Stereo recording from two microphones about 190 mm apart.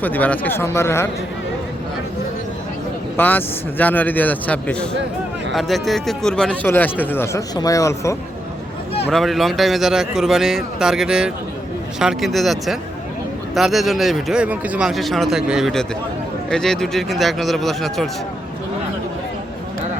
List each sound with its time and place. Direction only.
0.0 s speech: 10° left (ahead or behind)
3.2 s speech: 10° left (ahead or behind)
9.0 s speech: centre (ahead or behind)